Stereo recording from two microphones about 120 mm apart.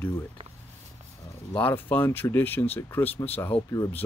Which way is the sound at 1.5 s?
15° left (ahead or behind).